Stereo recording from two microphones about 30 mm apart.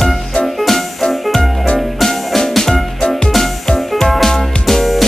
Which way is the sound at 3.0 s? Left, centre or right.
Left.